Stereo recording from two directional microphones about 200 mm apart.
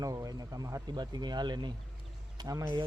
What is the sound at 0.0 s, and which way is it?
Speech, 15° right (ahead or behind).